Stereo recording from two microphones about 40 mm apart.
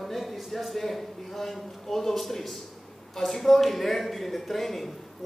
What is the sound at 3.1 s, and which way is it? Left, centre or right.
A man's voice, centre.